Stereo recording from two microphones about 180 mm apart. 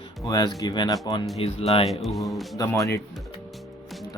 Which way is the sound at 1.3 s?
35° left (ahead or behind).